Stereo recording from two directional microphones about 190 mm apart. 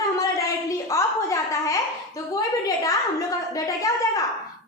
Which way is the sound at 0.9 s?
15° left (ahead or behind).